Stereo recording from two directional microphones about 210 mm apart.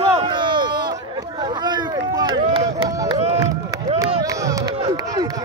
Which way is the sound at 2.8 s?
20° right (ahead or behind).